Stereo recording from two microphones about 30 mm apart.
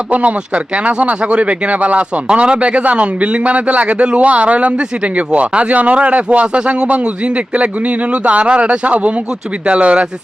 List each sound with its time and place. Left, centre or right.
0.1 s speech: right
2.2 s speech: right